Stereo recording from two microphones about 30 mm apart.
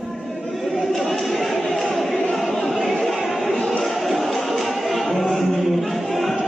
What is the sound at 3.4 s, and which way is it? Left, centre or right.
Music, left.